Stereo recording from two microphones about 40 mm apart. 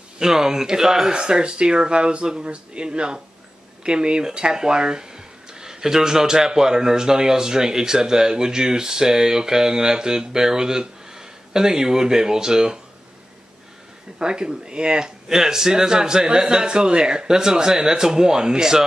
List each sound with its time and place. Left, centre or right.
0.2 s speech: centre
14.1 s speech: right